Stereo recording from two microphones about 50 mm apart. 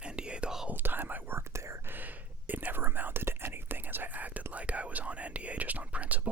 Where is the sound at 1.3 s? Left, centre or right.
Right.